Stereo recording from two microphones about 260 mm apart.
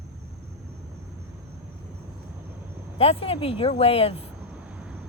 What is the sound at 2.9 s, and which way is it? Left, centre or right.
Speech, left.